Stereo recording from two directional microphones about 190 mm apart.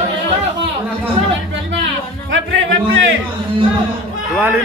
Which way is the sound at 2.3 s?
85° right.